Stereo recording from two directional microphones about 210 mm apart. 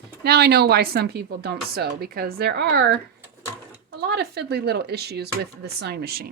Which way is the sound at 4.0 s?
50° right (ahead or behind).